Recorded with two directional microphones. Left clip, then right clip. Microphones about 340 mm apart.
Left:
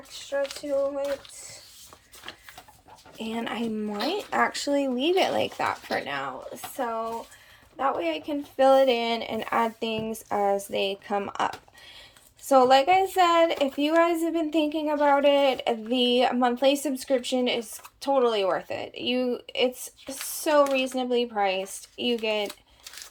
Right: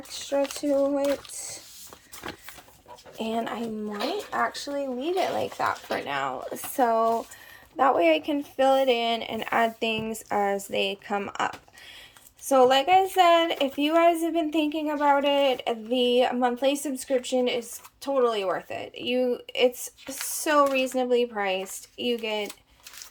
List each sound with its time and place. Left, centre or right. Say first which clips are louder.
0.2 s a sound: right 2 dB; right
3.2 s speech: right 3 dB; centre
4.3 s speech: left 3 dB; centre
4.5 s speech: left 4 dB; centre
6.7 s speech: right 8 dB; centre